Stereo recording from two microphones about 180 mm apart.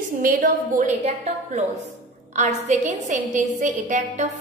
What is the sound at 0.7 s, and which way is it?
Speech, 40° right (ahead or behind).